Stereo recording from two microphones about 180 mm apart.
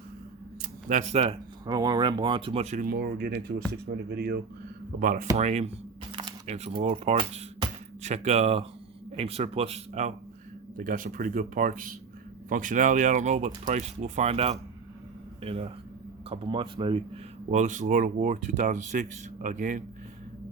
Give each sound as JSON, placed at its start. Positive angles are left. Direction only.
{"t": 0.6, "sound": "a sound", "side_deg": -45}
{"t": 1.6, "sound": "speech", "side_deg": -20}
{"t": 4.9, "sound": "speech", "side_deg": -45}
{"t": 10.8, "sound": "speech", "side_deg": -50}
{"t": 17.5, "sound": "speech", "side_deg": -45}